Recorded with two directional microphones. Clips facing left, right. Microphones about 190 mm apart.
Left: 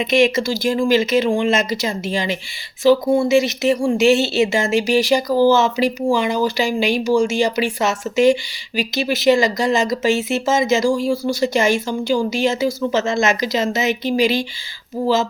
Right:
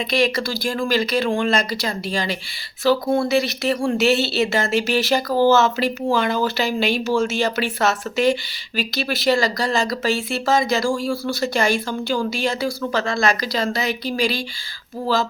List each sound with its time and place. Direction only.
0.0 s speech: 20° left (ahead or behind)